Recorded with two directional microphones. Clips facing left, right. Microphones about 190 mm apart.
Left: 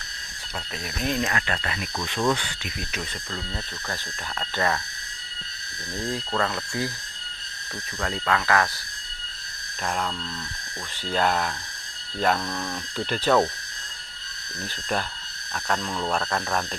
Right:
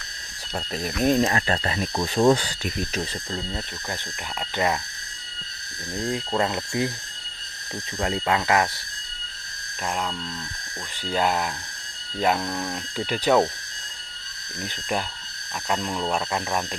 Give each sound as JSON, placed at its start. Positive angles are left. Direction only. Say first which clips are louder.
{"t": 0.6, "sound": "speech", "louder": "right 7 dB", "side_deg": -40}
{"t": 3.5, "sound": "speech", "louder": "right 2 dB", "side_deg": -15}
{"t": 6.0, "sound": "speech", "louder": "right 2 dB", "side_deg": -20}
{"t": 8.0, "sound": "speech", "louder": "right 2 dB", "side_deg": -20}
{"t": 9.8, "sound": "speech", "louder": "even", "side_deg": -5}
{"t": 14.6, "sound": "speech", "louder": "right 1 dB", "side_deg": -10}